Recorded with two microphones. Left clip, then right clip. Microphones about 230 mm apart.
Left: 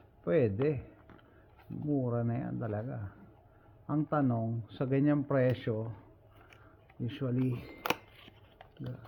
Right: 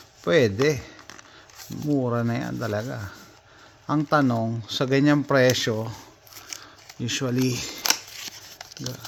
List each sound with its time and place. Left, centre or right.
0.3 s speech: right
1.7 s speech: centre
2.0 s speech: right
7.0 s speech: right
7.8 s scissors: centre